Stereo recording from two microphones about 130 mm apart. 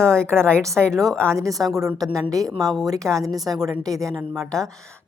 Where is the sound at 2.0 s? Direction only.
25° right (ahead or behind).